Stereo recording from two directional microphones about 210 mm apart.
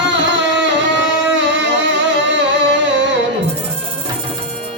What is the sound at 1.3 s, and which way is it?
Music, 60° right (ahead or behind).